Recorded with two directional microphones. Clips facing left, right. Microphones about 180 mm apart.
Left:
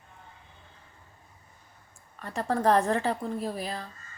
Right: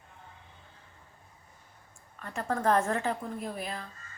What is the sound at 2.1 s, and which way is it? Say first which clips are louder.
A woman's voice: left 4 dB; 35° left (ahead or behind).